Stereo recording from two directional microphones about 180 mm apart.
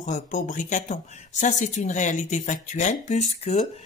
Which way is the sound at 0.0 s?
45° left (ahead or behind).